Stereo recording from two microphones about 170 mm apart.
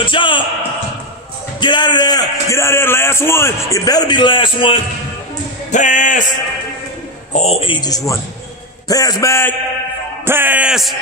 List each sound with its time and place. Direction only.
0.0 s music: 30° left (ahead or behind)
1.6 s a man's voice: 25° left (ahead or behind)
5.7 s speech: 45° left (ahead or behind)
7.3 s a man's voice: 35° left (ahead or behind); by 9.6 s 15° left (ahead or behind)
10.2 s speech: 10° right (ahead or behind)